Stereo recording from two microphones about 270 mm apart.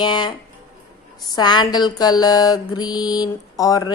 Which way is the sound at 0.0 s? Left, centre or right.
Centre.